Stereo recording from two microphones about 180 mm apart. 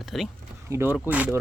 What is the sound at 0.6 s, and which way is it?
Speech, 15° right (ahead or behind).